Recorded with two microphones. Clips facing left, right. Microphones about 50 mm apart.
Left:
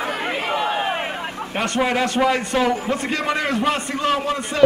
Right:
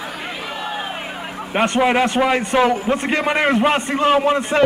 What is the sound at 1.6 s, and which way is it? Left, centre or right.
A man's voice, right.